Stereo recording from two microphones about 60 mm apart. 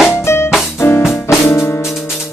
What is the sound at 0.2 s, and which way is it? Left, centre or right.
Music, left.